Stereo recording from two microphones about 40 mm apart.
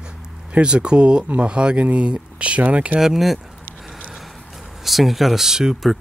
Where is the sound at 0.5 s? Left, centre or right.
Right.